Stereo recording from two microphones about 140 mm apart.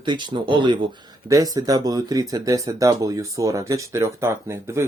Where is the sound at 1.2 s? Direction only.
25° right (ahead or behind).